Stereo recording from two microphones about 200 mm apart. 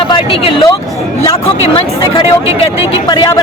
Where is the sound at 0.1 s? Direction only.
25° left (ahead or behind).